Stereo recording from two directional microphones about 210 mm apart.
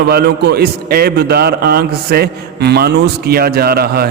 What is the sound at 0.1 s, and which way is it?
A man's voice, 50° right (ahead or behind).